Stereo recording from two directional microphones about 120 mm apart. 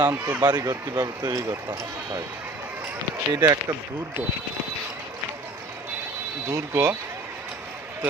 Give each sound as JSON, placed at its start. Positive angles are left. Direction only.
{"t": 0.0, "sound": "speech", "side_deg": -30}
{"t": 3.3, "sound": "speech", "side_deg": -35}
{"t": 6.5, "sound": "speech", "side_deg": -25}